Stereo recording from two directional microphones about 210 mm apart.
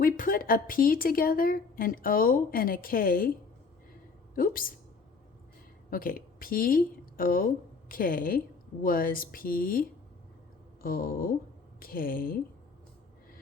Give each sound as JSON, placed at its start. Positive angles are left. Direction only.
{"t": 0.0, "sound": "speech", "side_deg": 40}
{"t": 4.4, "sound": "speech", "side_deg": 40}
{"t": 5.9, "sound": "speech", "side_deg": 45}
{"t": 10.8, "sound": "speech", "side_deg": 45}